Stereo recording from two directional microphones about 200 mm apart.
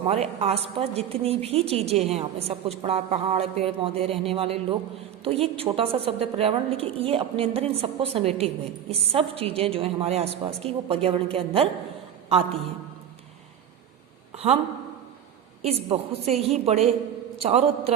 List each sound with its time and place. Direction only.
0.0 s a woman's voice: 30° right (ahead or behind)
14.3 s a woman's voice: 30° right (ahead or behind)
15.6 s a woman's voice: 30° right (ahead or behind)